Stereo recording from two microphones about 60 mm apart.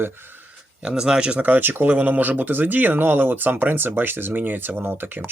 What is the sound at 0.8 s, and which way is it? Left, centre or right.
Speech, centre.